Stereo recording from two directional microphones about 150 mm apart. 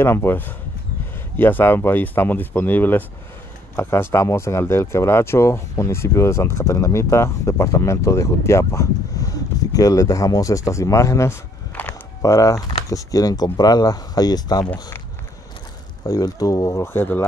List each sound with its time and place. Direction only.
0.0 s speech: 15° left (ahead or behind)
16.1 s speech: 25° left (ahead or behind)